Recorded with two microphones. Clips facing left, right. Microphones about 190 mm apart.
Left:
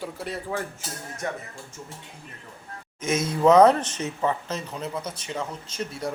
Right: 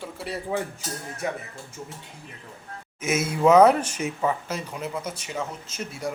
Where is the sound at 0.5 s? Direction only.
20° right (ahead or behind).